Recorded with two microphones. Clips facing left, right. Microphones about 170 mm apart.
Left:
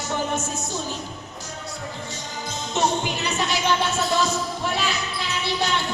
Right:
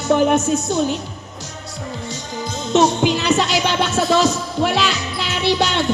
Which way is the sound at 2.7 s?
90° right.